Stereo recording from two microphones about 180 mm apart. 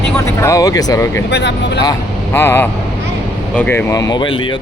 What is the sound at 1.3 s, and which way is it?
Speech, 70° left (ahead or behind).